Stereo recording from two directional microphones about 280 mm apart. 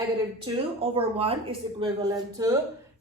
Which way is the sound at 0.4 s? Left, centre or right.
Centre.